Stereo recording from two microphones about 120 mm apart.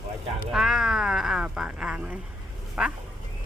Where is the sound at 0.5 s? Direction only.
5° right (ahead or behind).